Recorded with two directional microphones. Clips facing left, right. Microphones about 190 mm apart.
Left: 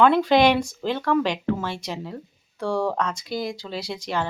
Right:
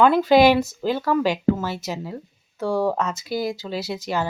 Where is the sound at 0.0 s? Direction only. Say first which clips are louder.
Right 2 dB; 5° right (ahead or behind).